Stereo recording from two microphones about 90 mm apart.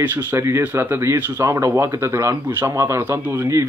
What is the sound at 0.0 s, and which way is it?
Speech, 20° right (ahead or behind).